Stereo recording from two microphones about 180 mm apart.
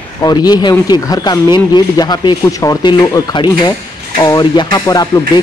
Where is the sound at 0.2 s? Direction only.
20° left (ahead or behind).